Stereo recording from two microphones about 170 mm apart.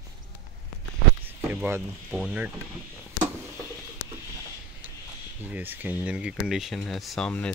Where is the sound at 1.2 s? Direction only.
10° right (ahead or behind).